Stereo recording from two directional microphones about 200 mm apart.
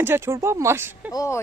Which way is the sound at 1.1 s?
15° left (ahead or behind).